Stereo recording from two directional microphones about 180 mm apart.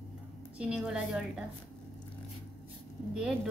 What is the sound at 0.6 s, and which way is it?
Speech, 5° right (ahead or behind).